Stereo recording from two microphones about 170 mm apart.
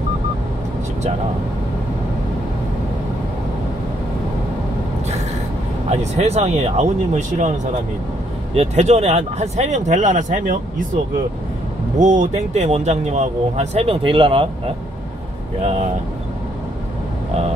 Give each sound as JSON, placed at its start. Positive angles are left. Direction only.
{"t": 5.9, "sound": "speech", "side_deg": -40}
{"t": 8.5, "sound": "speech", "side_deg": -40}
{"t": 12.0, "sound": "speech", "side_deg": -45}